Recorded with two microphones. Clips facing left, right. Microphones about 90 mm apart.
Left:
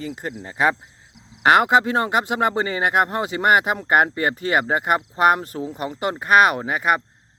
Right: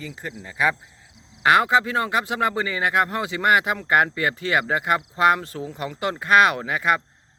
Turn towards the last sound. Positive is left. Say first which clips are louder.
# left 2 dB
turn(degrees=25)  # may be behind; listen again after turning